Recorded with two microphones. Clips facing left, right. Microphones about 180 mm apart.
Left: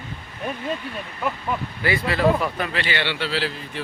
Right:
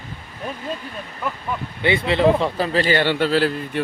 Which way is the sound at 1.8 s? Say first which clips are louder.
Right 3 dB; 25° right (ahead or behind).